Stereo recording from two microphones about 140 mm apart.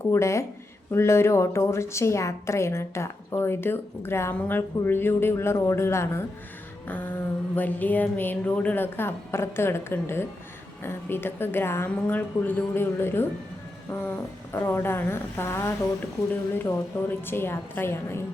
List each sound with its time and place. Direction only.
0.0 s a woman's voice: 20° left (ahead or behind)